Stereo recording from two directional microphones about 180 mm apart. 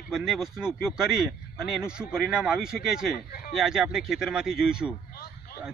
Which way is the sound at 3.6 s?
5° right (ahead or behind).